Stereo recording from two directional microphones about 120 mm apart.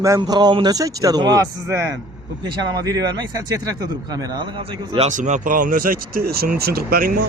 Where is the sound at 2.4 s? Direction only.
35° right (ahead or behind).